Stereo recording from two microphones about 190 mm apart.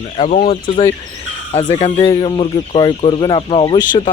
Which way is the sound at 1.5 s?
25° left (ahead or behind).